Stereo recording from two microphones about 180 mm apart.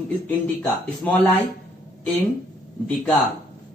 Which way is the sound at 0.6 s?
10° left (ahead or behind).